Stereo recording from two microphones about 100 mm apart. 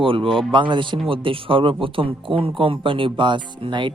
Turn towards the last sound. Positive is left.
turn(degrees=-55)  # may be behind; listen again after turning